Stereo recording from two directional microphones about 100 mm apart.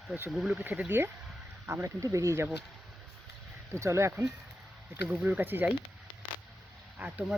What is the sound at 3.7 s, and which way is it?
Speech, 30° right (ahead or behind).